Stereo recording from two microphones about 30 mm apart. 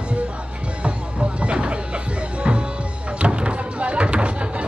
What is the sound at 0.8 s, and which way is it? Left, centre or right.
Music, right.